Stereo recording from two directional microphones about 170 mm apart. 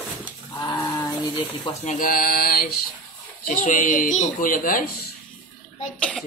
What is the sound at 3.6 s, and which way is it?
Speech, 50° left (ahead or behind).